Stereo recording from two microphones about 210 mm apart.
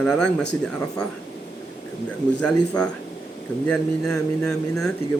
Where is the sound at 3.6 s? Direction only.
5° left (ahead or behind).